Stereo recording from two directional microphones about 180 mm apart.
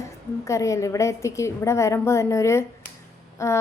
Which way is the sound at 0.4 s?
15° left (ahead or behind).